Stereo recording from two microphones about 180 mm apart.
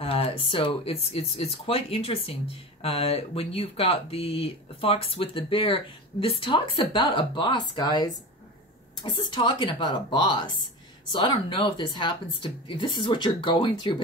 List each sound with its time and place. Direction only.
0.0 s speech: 30° left (ahead or behind)